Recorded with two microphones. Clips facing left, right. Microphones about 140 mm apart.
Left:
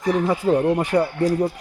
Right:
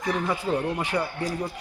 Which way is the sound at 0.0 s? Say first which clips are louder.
Left 7 dB; 40° left (ahead or behind).